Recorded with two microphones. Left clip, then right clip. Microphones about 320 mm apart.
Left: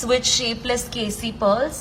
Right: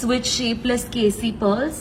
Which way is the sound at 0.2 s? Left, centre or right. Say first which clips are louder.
Left 2 dB; centre.